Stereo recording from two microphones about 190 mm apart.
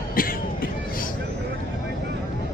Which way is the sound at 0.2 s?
50° left (ahead or behind).